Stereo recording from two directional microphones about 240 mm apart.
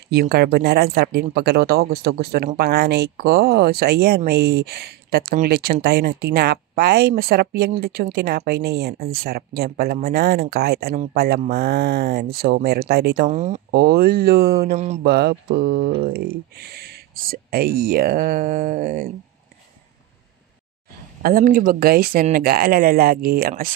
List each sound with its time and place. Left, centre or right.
0.1 s speech: right
13.3 s speech: right
13.7 s speech: right
15.0 s speech: right
21.2 s speech: right